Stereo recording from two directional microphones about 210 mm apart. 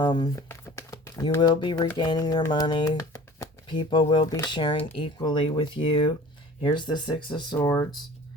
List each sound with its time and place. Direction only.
0.0 s speech: 20° left (ahead or behind)